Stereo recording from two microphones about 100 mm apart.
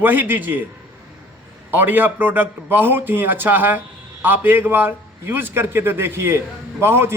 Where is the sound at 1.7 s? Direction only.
20° right (ahead or behind).